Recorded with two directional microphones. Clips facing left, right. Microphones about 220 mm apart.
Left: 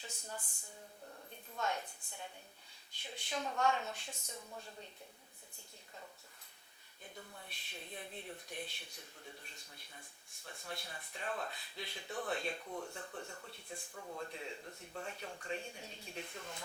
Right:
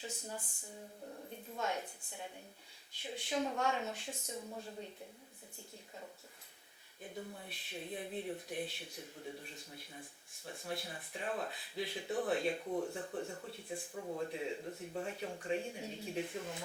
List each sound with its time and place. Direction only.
0.0 s speech: 5° right (ahead or behind)
1.5 s speech: 5° right (ahead or behind)
7.0 s speech: 10° right (ahead or behind)
12.6 s speech: 20° right (ahead or behind)
13.5 s speech: 5° right (ahead or behind)
13.9 s speech: 20° right (ahead or behind)